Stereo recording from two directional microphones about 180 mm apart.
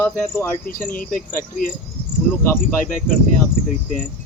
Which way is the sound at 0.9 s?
50° left (ahead or behind).